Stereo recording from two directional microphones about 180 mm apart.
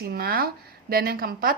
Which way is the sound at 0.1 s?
55° right (ahead or behind).